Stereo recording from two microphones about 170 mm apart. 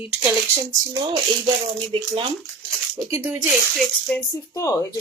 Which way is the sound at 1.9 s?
35° right (ahead or behind).